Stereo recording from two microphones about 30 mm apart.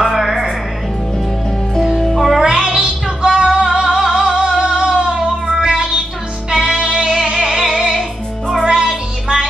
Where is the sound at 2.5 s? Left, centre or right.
Right.